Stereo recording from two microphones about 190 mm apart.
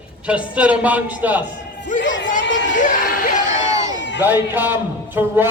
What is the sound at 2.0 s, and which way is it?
Speech, 75° left (ahead or behind).